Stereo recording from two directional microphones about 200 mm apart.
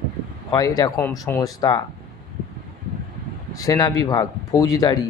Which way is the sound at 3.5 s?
20° left (ahead or behind).